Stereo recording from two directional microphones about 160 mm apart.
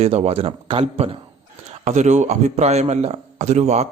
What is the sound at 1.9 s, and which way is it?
A man's voice, 45° right (ahead or behind).